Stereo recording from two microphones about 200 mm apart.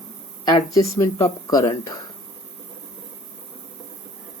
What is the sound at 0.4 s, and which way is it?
Speech, 20° left (ahead or behind).